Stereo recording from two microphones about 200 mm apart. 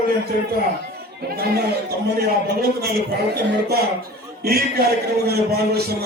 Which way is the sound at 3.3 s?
50° right (ahead or behind).